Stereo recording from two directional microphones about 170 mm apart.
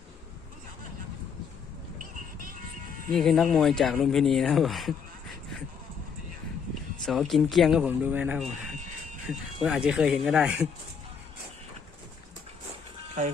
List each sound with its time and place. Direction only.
3.1 s speech: centre (ahead or behind)
7.0 s speech: centre (ahead or behind)
9.6 s speech: 5° right (ahead or behind)